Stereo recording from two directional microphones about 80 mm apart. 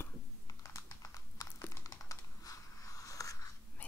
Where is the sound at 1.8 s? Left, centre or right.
Left.